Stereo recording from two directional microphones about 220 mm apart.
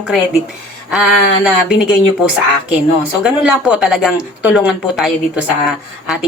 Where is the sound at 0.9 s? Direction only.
5° right (ahead or behind).